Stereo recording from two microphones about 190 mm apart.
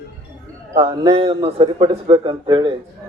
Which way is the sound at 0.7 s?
35° right (ahead or behind).